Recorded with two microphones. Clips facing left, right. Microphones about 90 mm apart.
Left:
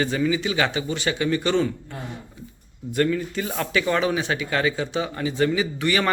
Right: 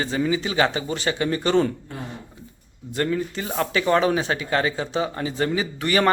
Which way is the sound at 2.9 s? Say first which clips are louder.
Left 2 dB; 30° right (ahead or behind).